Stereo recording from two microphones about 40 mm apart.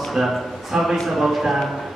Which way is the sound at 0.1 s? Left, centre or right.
Centre.